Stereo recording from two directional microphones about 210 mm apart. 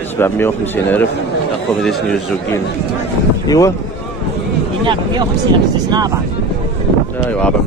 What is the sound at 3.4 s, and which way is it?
Speech, 15° left (ahead or behind).